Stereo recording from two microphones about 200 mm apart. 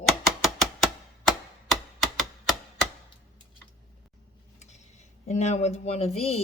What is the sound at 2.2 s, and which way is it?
Typewriter, centre (ahead or behind).